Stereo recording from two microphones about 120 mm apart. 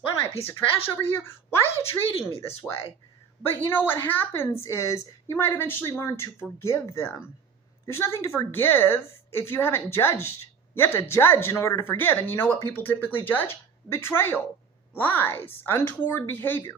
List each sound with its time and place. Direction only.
0.9 s a woman's voice: 20° left (ahead or behind)
2.0 s speech: 50° left (ahead or behind)
3.4 s a woman's voice: 20° left (ahead or behind)